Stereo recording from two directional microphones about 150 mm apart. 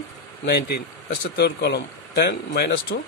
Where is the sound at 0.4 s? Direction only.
90° left.